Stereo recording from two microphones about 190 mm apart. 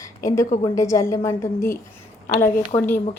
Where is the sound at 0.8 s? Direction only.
15° left (ahead or behind).